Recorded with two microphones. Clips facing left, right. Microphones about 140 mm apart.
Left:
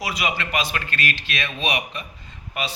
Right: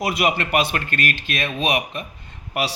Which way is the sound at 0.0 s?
55° right (ahead or behind).